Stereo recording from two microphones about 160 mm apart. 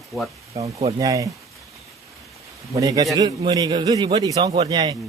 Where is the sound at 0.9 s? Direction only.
20° right (ahead or behind).